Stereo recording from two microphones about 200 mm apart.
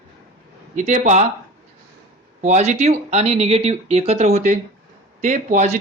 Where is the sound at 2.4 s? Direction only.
35° right (ahead or behind).